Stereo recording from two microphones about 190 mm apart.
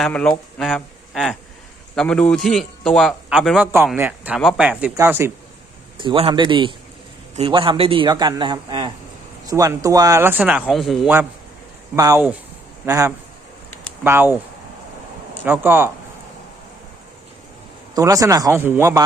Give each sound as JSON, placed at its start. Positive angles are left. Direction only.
{"t": 0.0, "sound": "a man's voice", "side_deg": 5}
{"t": 6.0, "sound": "speech", "side_deg": -25}
{"t": 11.9, "sound": "a man's voice", "side_deg": -20}
{"t": 15.4, "sound": "speech", "side_deg": -10}
{"t": 17.9, "sound": "speech", "side_deg": -20}